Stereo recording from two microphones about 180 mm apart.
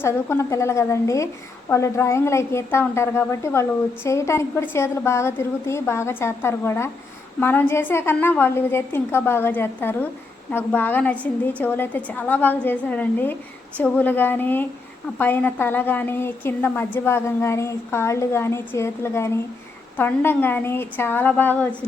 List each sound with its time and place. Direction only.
0.0 s a woman's voice: 15° left (ahead or behind)